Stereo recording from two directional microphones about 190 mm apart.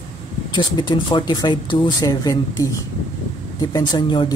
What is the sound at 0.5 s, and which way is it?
Speech, 25° left (ahead or behind).